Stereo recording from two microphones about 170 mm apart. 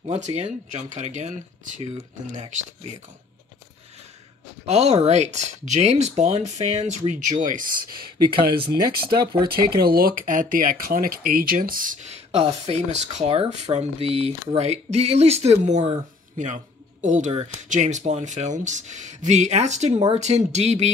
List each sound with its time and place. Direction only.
0.0 s speech: 40° right (ahead or behind)
4.6 s speech: 40° right (ahead or behind)